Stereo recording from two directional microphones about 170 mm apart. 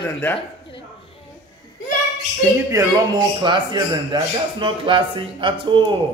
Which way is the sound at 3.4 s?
25° right (ahead or behind).